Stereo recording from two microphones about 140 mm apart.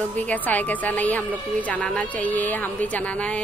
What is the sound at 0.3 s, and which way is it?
Mantra, 10° left (ahead or behind).